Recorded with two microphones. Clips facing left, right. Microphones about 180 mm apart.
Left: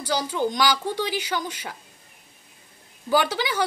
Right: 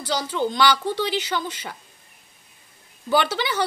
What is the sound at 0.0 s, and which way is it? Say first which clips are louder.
A woman's voice: even; 10° left (ahead or behind).